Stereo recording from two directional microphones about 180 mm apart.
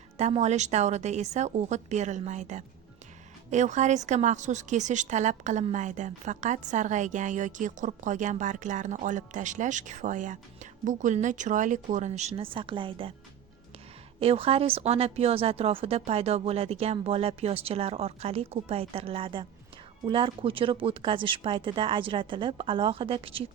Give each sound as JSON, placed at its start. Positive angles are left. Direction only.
{"t": 0.2, "sound": "a woman's voice", "side_deg": -35}
{"t": 14.2, "sound": "speech", "side_deg": -35}